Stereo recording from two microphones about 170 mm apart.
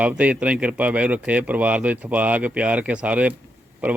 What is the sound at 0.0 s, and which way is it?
A man's voice, 10° right (ahead or behind).